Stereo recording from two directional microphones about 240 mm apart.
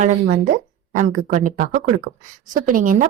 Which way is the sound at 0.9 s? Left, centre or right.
Right.